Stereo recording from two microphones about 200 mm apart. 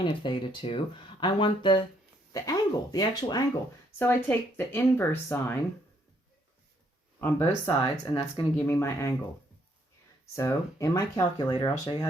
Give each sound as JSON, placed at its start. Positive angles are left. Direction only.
{"t": 0.0, "sound": "speech", "side_deg": 25}
{"t": 7.2, "sound": "speech", "side_deg": 15}
{"t": 8.5, "sound": "speech", "side_deg": 15}
{"t": 10.3, "sound": "speech", "side_deg": 15}